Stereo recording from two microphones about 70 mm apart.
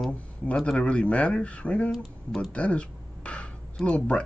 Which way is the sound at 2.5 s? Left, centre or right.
Centre.